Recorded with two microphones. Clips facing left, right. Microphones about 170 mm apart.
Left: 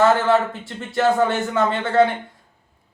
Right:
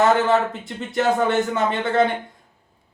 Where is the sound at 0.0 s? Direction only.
20° right (ahead or behind).